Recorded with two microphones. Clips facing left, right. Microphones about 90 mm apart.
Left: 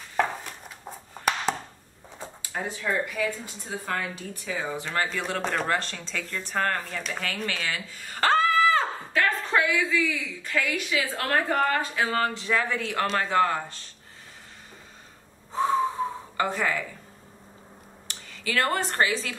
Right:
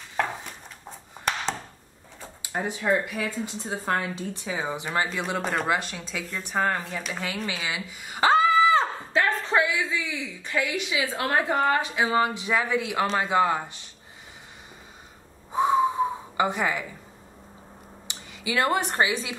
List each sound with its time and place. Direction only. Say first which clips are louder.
0.2 s a sound: left 2 dB; 5° left (ahead or behind)
2.4 s speech: right 4 dB; 20° right (ahead or behind)
13.0 s a man's voice: left 1 dB; centre (ahead or behind)
13.3 s speech: right 1 dB; 15° right (ahead or behind)
15.5 s gasp: right 3 dB; 15° right (ahead or behind)
18.0 s speech: even; 15° right (ahead or behind)